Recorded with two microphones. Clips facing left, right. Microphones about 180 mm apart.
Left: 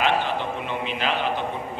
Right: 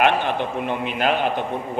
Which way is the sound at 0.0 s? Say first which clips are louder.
Right 4 dB; 55° right (ahead or behind).